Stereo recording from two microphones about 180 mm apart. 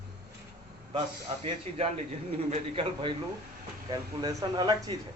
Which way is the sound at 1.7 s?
35° right (ahead or behind).